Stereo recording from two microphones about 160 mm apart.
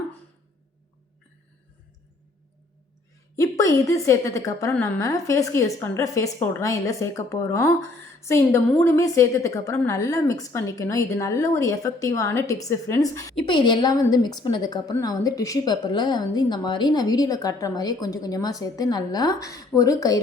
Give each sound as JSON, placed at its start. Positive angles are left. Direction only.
{"t": 3.3, "sound": "a woman's voice", "side_deg": 20}